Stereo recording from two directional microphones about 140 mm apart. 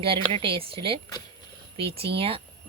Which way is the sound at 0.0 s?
40° right (ahead or behind).